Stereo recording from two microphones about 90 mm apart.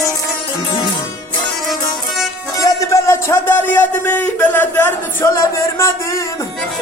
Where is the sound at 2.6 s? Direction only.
45° left (ahead or behind).